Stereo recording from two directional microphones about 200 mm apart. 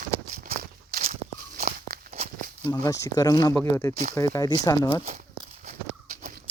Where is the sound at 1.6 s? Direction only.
45° right (ahead or behind).